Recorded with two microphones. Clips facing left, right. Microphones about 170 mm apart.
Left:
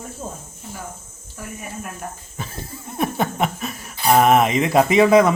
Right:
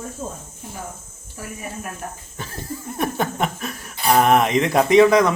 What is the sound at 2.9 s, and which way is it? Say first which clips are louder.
Speech: left 2 dB; centre (ahead or behind).